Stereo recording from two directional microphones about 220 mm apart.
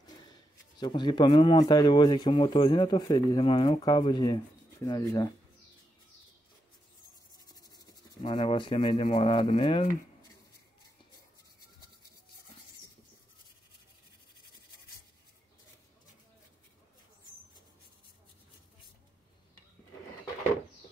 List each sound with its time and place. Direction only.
0.0 s speech: 20° left (ahead or behind)
7.8 s speech: 20° left (ahead or behind)